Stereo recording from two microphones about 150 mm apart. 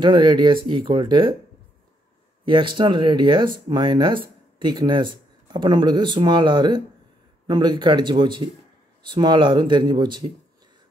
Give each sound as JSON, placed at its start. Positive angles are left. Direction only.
{"t": 0.0, "sound": "speech", "side_deg": -30}
{"t": 2.4, "sound": "speech", "side_deg": -35}